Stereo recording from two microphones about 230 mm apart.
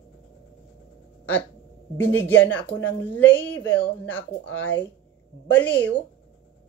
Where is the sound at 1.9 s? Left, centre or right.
Centre.